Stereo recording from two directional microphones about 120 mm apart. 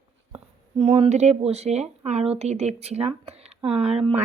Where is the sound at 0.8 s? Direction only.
60° right (ahead or behind).